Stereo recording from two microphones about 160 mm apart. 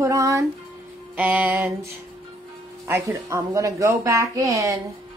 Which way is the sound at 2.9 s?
20° right (ahead or behind).